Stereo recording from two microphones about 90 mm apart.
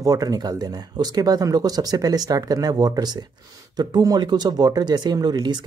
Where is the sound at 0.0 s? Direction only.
40° right (ahead or behind).